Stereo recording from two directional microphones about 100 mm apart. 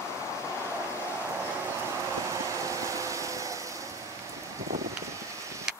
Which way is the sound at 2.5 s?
30° right (ahead or behind).